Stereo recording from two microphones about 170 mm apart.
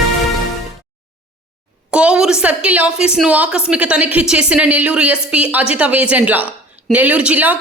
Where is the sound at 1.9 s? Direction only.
5° right (ahead or behind).